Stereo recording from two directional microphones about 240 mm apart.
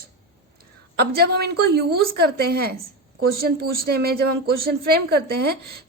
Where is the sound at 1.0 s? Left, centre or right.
Right.